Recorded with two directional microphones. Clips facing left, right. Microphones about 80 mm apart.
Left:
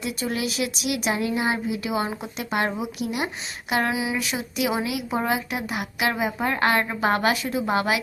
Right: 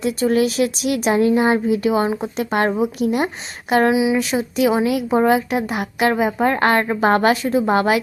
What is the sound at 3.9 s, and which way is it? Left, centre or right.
Speech, centre.